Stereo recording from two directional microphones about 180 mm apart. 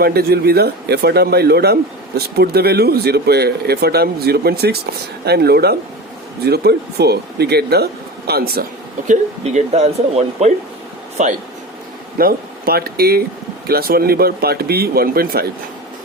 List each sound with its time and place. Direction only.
0.0 s speech: 60° right (ahead or behind)
9.0 s speech: 40° right (ahead or behind)
12.1 s speech: 55° right (ahead or behind)